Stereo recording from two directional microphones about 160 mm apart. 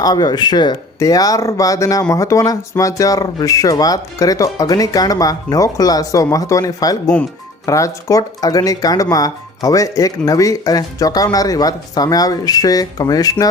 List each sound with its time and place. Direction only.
0.0 s speech: 25° left (ahead or behind)